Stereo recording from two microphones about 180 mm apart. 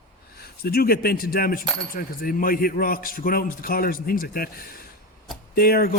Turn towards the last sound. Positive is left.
turn(degrees=55)  # may be behind; listen again after turning